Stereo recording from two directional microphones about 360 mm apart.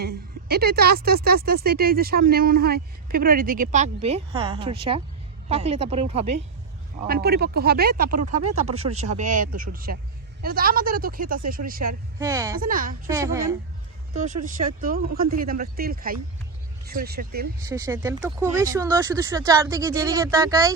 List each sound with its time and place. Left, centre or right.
0.0 s speech: right
12.2 s speech: centre
12.5 s speech: right
13.1 s speech: centre
14.4 s speech: right
17.7 s speech: centre